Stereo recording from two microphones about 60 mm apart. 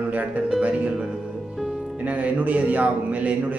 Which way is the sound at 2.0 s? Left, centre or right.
Right.